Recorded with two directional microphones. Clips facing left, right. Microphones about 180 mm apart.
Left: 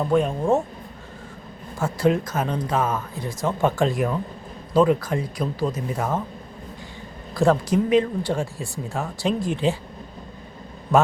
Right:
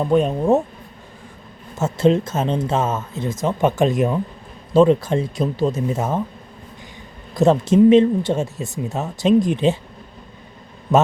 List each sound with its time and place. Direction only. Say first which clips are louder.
0.0 s speech: right 3 dB; 20° right (ahead or behind)
1.8 s speech: right 4 dB; 25° right (ahead or behind)
7.3 s speech: right 5 dB; 20° right (ahead or behind)